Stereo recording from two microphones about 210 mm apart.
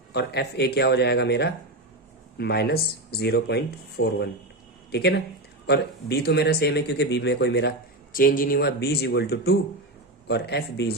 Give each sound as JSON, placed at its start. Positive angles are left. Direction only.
{"t": 0.1, "sound": "speech", "side_deg": 50}
{"t": 8.1, "sound": "speech", "side_deg": 40}